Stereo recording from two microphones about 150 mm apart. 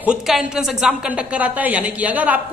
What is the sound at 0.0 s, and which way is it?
A man's voice, 5° right (ahead or behind).